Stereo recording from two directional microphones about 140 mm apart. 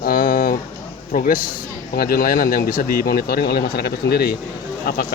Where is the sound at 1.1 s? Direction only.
85° left.